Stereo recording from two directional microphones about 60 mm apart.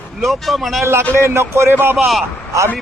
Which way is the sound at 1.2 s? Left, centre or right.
Right.